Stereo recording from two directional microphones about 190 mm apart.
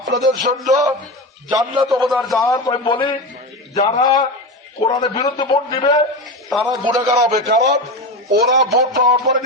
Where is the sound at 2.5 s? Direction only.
25° left (ahead or behind).